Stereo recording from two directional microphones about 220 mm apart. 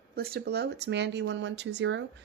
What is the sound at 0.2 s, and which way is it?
Speech, 45° right (ahead or behind).